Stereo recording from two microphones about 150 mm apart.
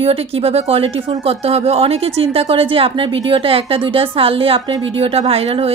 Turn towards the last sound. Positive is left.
turn(degrees=-45)  # may be behind; listen again after turning